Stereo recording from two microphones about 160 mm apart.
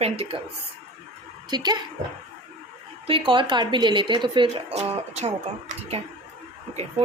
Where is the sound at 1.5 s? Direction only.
25° right (ahead or behind).